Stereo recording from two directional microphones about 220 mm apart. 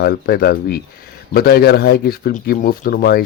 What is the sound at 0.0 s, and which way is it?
Speech, 45° left (ahead or behind).